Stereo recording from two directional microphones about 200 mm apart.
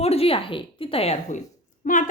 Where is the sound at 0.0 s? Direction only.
30° left (ahead or behind).